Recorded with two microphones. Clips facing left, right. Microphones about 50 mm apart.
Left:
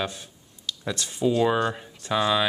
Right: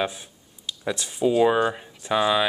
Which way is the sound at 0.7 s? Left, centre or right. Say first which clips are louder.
Right 2 dB; centre.